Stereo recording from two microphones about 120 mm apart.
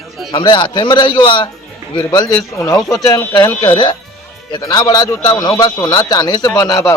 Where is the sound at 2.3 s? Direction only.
25° left (ahead or behind).